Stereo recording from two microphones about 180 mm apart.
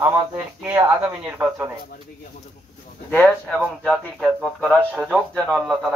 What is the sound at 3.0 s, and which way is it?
Speech, 10° left (ahead or behind).